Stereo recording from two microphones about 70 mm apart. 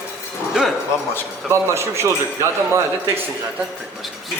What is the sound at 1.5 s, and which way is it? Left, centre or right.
Speech, right.